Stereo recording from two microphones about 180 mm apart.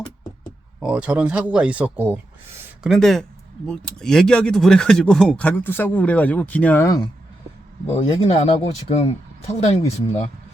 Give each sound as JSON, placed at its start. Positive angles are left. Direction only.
{"t": 0.8, "sound": "speech", "side_deg": -5}
{"t": 8.2, "sound": "speech", "side_deg": 35}